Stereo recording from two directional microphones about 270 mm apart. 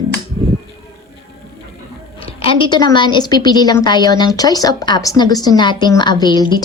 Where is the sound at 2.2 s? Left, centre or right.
Centre.